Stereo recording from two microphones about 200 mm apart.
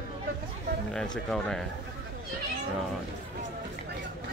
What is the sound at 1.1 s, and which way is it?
Speech, 5° left (ahead or behind).